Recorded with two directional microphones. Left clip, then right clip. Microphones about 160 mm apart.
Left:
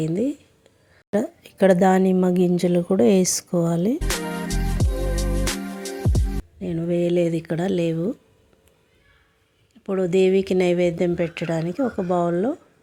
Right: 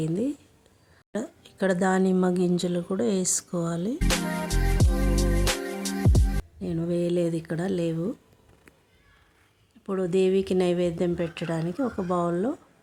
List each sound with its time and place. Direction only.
0.0 s speech: 15° left (ahead or behind)
1.1 s speech: 25° left (ahead or behind)
4.2 s music: centre (ahead or behind)
6.6 s a sound: 10° left (ahead or behind)
9.8 s speech: 10° left (ahead or behind)